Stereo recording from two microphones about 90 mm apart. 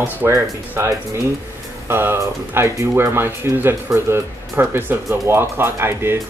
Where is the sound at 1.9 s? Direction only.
25° right (ahead or behind).